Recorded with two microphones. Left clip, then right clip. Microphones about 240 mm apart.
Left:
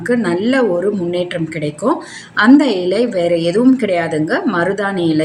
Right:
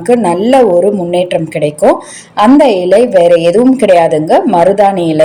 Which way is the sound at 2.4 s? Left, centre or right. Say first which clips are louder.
Right 5 dB; centre.